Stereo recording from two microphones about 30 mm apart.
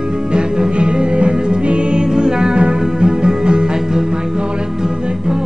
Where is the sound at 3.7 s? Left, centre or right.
Centre.